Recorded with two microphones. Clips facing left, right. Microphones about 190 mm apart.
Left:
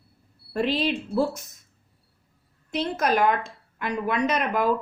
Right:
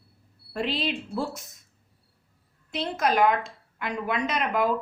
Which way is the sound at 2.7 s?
45° left (ahead or behind).